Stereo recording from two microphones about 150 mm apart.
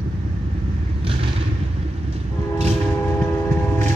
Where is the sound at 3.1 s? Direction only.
15° left (ahead or behind).